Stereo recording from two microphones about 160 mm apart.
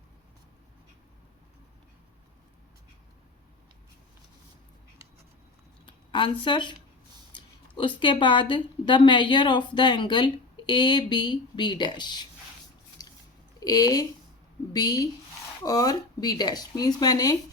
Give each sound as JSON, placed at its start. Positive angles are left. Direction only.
{"t": 5.8, "sound": "a sound", "side_deg": 30}
{"t": 7.3, "sound": "speech", "side_deg": 30}
{"t": 13.0, "sound": "biting", "side_deg": 25}
{"t": 13.6, "sound": "speech", "side_deg": 20}